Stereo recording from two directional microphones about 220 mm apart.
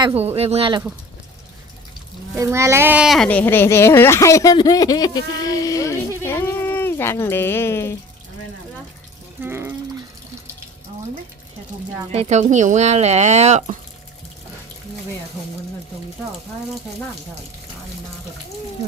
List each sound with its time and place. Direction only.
0.0 s speech: 25° right (ahead or behind)
2.3 s a child's voice: 10° right (ahead or behind); by 7.9 s 10° left (ahead or behind)
9.4 s a sound: 10° right (ahead or behind)
12.1 s speech: 30° right (ahead or behind)